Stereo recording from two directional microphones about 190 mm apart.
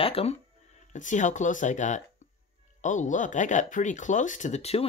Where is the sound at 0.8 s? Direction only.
40° left (ahead or behind).